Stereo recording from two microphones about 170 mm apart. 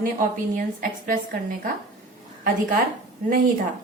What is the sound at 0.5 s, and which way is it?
Speech, 55° right (ahead or behind).